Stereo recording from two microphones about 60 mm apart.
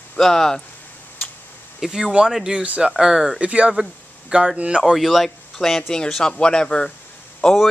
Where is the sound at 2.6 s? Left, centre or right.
Right.